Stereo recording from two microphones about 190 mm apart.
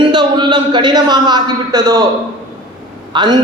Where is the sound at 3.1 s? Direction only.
25° right (ahead or behind).